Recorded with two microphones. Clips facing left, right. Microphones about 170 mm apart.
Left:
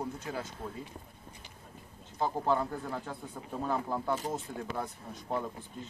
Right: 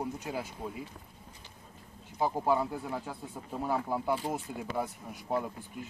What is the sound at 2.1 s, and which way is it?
Speech, 10° right (ahead or behind).